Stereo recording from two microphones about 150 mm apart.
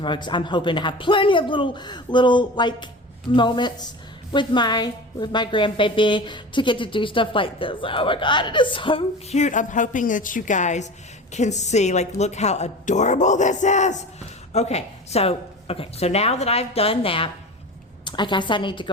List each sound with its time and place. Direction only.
0.0 s a woman's voice: 30° left (ahead or behind)
9.3 s a woman's voice: 55° left (ahead or behind); by 18.9 s 30° left (ahead or behind)